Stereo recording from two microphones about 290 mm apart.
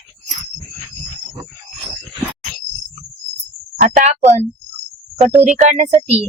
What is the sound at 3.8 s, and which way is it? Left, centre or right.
Speech, right.